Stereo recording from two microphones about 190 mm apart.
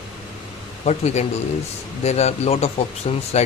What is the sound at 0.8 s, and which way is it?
Speech, 35° left (ahead or behind).